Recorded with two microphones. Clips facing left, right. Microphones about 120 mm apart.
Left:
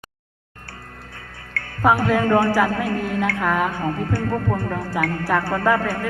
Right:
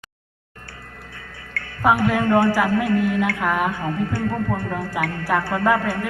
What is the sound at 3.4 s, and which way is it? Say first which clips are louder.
Speech: left 2 dB; 15° right (ahead or behind).